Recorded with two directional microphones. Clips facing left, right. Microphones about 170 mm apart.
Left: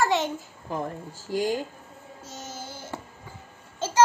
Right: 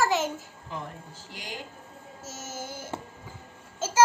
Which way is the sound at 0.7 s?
45° left (ahead or behind).